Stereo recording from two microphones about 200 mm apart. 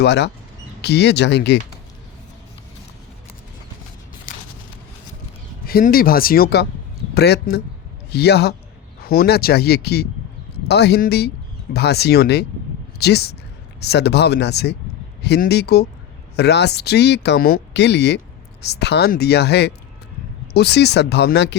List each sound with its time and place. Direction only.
0.0 s speech: 60° left (ahead or behind)
4.3 s a sound: 45° left (ahead or behind)
5.6 s speech: 50° left (ahead or behind)